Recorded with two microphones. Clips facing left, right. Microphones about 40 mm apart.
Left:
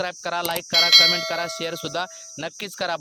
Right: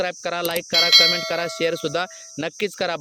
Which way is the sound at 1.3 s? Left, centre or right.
Right.